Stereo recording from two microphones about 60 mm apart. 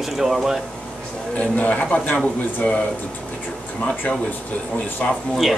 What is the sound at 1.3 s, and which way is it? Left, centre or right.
Speech, left.